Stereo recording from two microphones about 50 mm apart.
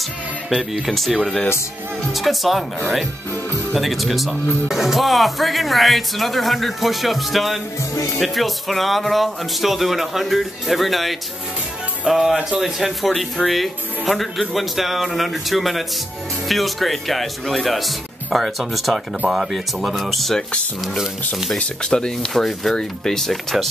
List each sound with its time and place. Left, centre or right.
0.5 s speech: centre
3.7 s speech: centre
21.5 s speech: centre
22.3 s speech: centre